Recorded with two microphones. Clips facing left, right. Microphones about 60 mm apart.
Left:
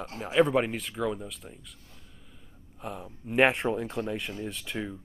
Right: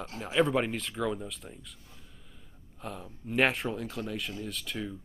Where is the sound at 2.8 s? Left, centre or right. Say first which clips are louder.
Left 2 dB; centre.